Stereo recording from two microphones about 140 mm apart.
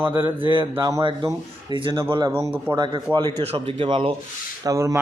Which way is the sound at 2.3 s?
15° right (ahead or behind).